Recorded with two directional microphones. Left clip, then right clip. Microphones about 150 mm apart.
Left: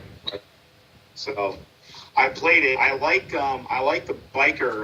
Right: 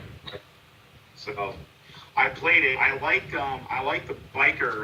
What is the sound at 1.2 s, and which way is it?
A man's voice, 85° left.